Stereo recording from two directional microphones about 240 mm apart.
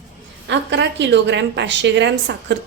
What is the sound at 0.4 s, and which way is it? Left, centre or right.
A woman's voice, right.